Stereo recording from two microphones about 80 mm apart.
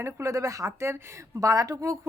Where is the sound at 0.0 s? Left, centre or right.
Right.